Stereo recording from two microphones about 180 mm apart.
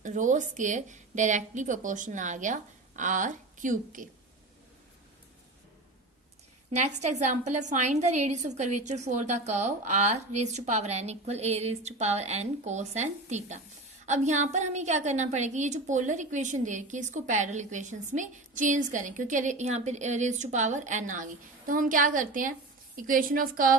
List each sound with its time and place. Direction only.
0.0 s a woman's voice: 45° right (ahead or behind)
6.7 s a woman's voice: 40° right (ahead or behind)